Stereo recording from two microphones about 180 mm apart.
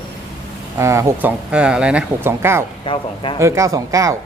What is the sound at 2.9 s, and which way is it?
Speech, 25° left (ahead or behind).